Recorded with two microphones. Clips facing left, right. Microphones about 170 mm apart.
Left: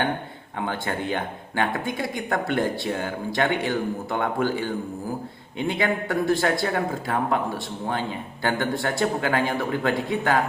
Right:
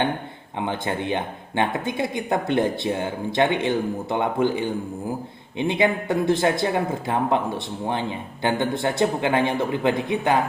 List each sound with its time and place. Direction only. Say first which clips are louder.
0.6 s speech: right 2 dB; 20° right (ahead or behind)